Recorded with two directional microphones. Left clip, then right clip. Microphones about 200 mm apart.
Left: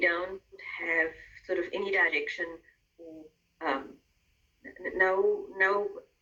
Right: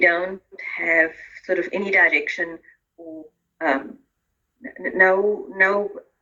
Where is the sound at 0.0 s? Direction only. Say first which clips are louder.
Right 10 dB; 90° right.